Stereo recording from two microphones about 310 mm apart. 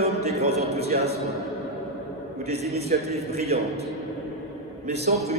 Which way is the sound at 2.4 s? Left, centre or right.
Centre.